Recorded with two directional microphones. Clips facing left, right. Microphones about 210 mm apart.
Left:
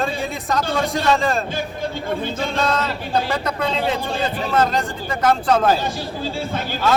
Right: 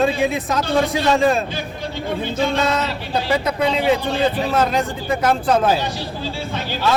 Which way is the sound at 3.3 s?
5° right (ahead or behind).